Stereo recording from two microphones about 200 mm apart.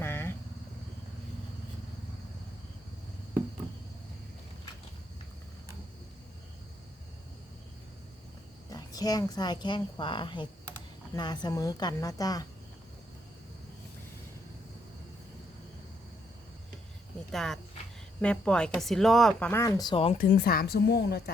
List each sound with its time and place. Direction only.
0.0 s a sound: 10° left (ahead or behind)
8.7 s a woman's voice: 20° left (ahead or behind)
17.3 s speech: centre (ahead or behind); by 20.1 s 25° left (ahead or behind)
20.1 s a woman's voice: 50° left (ahead or behind)